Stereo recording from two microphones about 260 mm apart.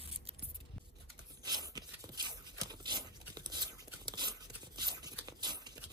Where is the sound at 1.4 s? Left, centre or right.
Centre.